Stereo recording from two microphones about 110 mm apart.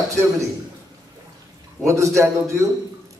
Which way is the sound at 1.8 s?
25° right (ahead or behind).